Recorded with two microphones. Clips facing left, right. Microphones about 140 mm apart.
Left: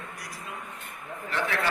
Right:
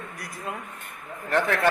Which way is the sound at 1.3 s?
50° right (ahead or behind).